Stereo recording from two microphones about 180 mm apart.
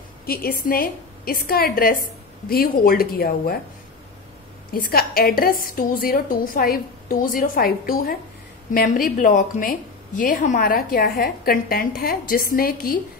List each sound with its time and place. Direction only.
0.3 s a woman's voice: 55° left (ahead or behind)
4.7 s a woman's voice: 55° left (ahead or behind)